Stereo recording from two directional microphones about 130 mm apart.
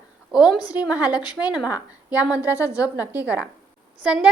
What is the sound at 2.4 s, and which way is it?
Speech, 25° left (ahead or behind).